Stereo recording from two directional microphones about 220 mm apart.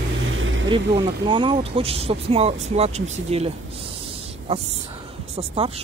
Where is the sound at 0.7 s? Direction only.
25° right (ahead or behind).